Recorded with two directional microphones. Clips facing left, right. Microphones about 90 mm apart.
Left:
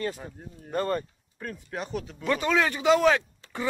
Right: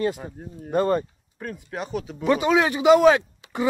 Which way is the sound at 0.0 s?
15° right (ahead or behind).